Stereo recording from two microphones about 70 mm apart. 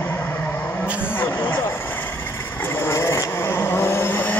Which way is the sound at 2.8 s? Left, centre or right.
Left.